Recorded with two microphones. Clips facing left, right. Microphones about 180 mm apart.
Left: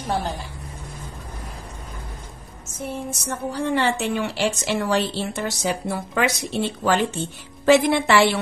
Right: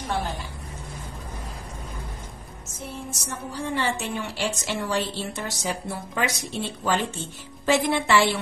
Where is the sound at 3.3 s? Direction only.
70° left (ahead or behind).